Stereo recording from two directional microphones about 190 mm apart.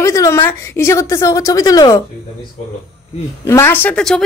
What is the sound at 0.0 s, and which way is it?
A woman's voice, 15° left (ahead or behind).